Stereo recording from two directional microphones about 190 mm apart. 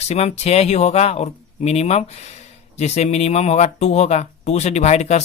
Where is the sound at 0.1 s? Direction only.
35° left (ahead or behind).